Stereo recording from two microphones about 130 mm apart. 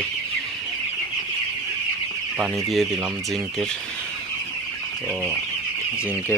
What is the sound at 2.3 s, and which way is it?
Speech, 5° right (ahead or behind).